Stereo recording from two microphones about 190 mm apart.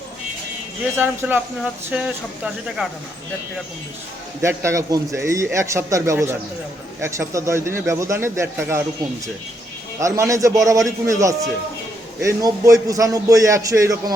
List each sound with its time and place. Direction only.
0.9 s a man's voice: 10° right (ahead or behind)
4.4 s a man's voice: 15° right (ahead or behind)
10.0 s a man's voice: 15° right (ahead or behind)